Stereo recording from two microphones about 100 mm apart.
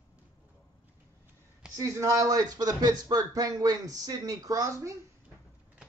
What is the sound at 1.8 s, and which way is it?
Speech, 35° right (ahead or behind).